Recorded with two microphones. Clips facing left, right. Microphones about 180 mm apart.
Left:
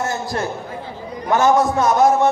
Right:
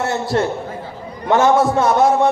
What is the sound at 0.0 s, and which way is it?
A man's voice, 25° right (ahead or behind).